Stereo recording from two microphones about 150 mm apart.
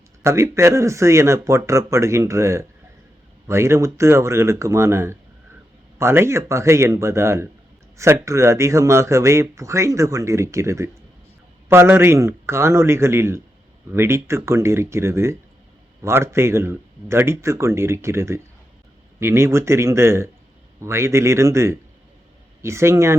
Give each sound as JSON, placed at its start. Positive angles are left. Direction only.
{"t": 0.2, "sound": "speech", "side_deg": -20}